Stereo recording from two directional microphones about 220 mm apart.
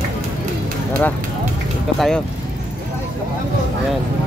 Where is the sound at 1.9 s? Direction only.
Centre (ahead or behind).